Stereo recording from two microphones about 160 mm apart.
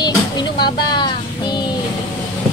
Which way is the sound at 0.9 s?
30° left (ahead or behind).